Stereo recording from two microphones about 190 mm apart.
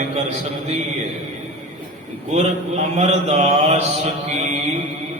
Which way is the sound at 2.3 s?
35° right (ahead or behind).